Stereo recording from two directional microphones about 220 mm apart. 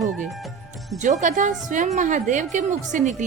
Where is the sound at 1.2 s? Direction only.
35° right (ahead or behind).